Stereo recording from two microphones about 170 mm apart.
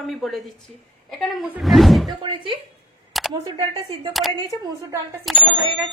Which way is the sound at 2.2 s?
25° right (ahead or behind).